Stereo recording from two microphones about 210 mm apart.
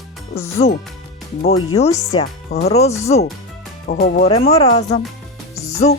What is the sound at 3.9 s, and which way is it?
Speech, 45° left (ahead or behind).